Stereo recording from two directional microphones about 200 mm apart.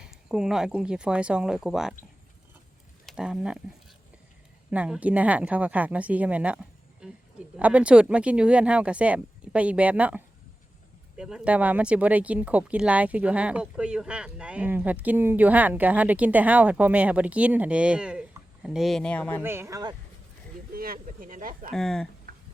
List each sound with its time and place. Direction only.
0.0 s speech: 5° right (ahead or behind)
3.1 s speech: 5° right (ahead or behind)
19.4 s speech: 10° right (ahead or behind)
20.7 s speech: 45° right (ahead or behind)
21.7 s speech: centre (ahead or behind)